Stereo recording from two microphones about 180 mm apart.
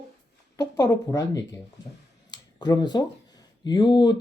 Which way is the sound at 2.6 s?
20° left (ahead or behind).